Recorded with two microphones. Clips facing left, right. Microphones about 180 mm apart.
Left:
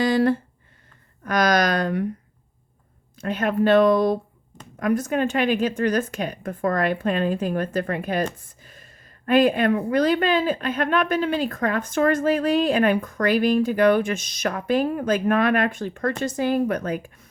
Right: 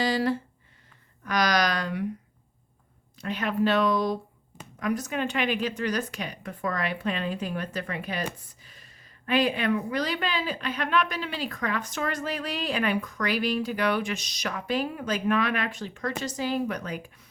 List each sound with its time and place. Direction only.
0.0 s a woman's voice: 50° left (ahead or behind)
3.2 s a woman's voice: 50° left (ahead or behind)